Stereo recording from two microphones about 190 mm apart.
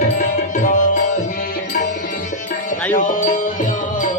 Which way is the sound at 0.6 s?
40° left (ahead or behind).